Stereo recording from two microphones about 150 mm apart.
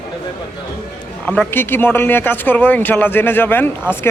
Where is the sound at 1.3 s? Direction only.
10° left (ahead or behind).